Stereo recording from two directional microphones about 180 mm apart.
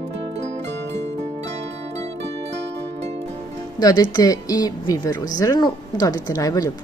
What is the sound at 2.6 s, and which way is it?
Music, 75° right (ahead or behind).